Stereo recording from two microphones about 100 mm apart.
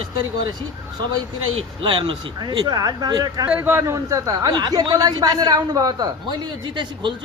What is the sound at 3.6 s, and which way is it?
A man's voice, 25° right (ahead or behind).